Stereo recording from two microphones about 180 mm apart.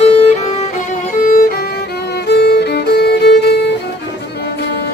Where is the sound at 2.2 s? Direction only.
65° left (ahead or behind).